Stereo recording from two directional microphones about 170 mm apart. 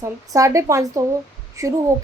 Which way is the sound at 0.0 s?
20° right (ahead or behind).